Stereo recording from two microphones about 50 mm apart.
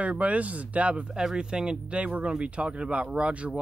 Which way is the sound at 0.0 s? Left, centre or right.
Right.